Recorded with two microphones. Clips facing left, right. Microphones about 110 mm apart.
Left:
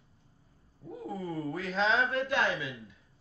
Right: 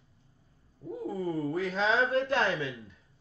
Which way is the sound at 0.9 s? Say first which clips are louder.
Right 4 dB; 25° right (ahead or behind).